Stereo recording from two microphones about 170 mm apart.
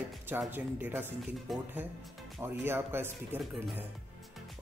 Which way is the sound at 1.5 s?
Centre (ahead or behind).